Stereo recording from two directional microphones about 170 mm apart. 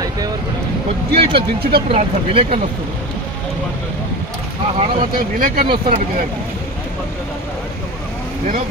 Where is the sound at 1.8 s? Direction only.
35° right (ahead or behind).